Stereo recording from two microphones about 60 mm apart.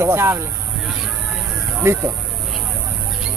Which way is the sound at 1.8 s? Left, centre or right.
Right.